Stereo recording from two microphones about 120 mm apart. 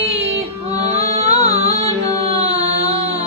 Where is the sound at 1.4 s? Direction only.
55° right (ahead or behind).